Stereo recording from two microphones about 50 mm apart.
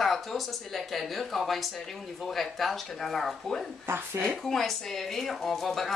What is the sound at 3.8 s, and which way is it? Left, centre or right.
Speech, right.